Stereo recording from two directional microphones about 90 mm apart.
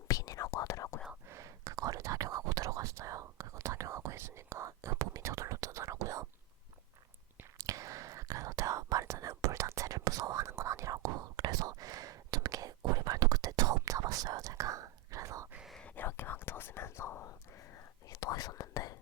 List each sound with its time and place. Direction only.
0.1 s whispering: 40° left (ahead or behind)
1.3 s whispering: 35° right (ahead or behind)
7.6 s whispering: 35° right (ahead or behind)
16.0 s whispering: 25° left (ahead or behind)
18.1 s whispering: 45° left (ahead or behind)